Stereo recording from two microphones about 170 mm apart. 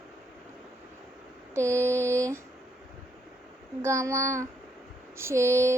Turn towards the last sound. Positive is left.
turn(degrees=-15)  # may be behind; listen again after turning